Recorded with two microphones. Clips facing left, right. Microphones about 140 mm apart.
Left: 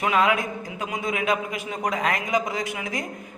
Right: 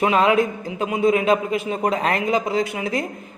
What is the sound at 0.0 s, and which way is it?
A man's voice, 30° right (ahead or behind).